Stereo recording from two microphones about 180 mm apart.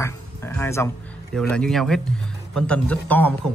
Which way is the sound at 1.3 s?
5° left (ahead or behind).